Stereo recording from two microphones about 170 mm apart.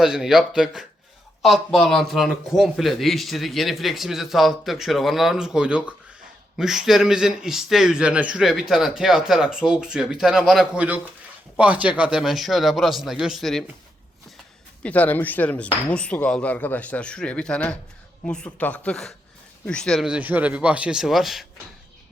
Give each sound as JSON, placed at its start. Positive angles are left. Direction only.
{"t": 0.0, "sound": "a man's voice", "side_deg": 0}
{"t": 14.8, "sound": "a man's voice", "side_deg": 10}